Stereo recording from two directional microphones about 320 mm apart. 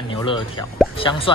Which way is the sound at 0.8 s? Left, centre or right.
Centre.